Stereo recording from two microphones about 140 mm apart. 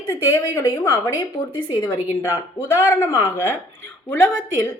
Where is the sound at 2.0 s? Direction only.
15° right (ahead or behind).